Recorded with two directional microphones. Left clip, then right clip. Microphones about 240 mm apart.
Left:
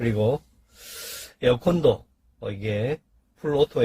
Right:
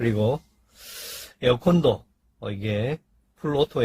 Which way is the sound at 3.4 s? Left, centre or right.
Centre.